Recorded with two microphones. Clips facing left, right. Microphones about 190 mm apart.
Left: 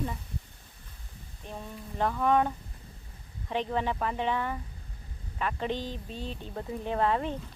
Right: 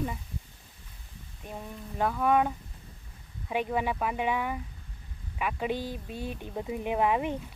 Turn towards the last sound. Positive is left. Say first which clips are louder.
# right 1 dB
turn(degrees=-15)  # may be behind; listen again after turning